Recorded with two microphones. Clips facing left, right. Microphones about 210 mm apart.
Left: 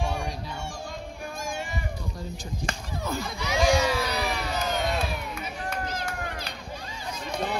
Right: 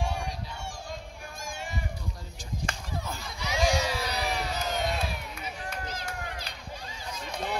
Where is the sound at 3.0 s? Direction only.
75° left (ahead or behind).